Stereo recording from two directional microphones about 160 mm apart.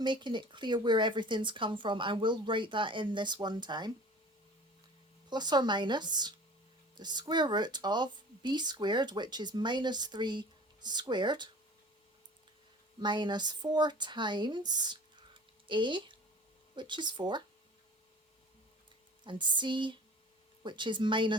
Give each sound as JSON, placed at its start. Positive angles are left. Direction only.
{"t": 0.0, "sound": "speech", "side_deg": -30}
{"t": 5.3, "sound": "speech", "side_deg": -25}
{"t": 13.0, "sound": "speech", "side_deg": -30}
{"t": 19.2, "sound": "speech", "side_deg": -30}